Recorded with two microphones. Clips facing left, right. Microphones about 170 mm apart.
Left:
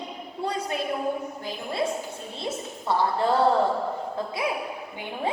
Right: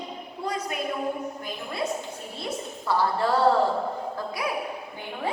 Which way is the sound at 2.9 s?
20° left (ahead or behind).